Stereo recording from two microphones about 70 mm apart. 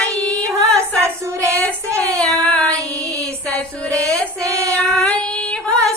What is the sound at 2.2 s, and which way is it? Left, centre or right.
Child singing, centre.